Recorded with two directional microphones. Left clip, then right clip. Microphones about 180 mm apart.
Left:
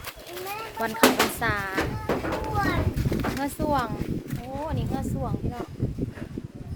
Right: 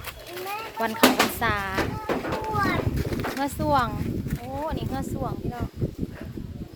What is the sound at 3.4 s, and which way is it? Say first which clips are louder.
Speech: right 4 dB; 15° right (ahead or behind).